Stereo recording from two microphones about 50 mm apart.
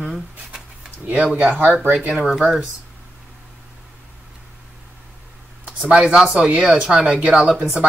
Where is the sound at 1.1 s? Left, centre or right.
Right.